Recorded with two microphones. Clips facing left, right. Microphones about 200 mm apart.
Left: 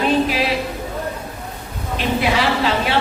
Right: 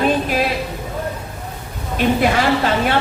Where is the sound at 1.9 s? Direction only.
50° right (ahead or behind).